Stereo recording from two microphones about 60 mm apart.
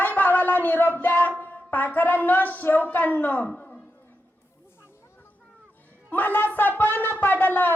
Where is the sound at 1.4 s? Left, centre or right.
Left.